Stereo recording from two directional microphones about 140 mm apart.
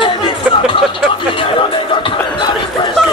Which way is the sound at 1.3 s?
40° left (ahead or behind).